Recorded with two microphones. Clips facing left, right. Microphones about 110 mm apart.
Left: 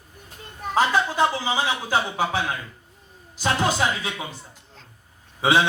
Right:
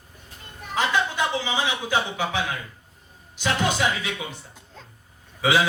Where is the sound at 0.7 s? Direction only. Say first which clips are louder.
Left 3 dB; 35° left (ahead or behind).